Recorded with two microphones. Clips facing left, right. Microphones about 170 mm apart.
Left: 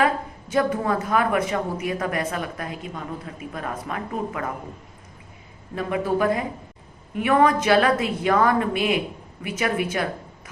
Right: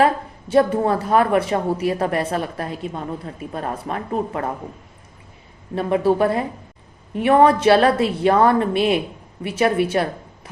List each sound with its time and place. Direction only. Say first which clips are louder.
0.0 s a woman's voice: right 4 dB; 30° right (ahead or behind)
5.7 s a woman's voice: right 6 dB; 30° right (ahead or behind)